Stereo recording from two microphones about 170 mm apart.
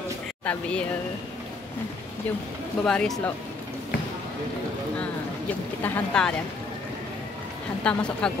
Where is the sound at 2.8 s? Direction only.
5° left (ahead or behind).